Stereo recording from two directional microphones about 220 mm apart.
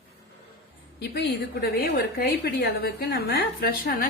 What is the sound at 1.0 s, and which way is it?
A woman's voice, 45° left (ahead or behind).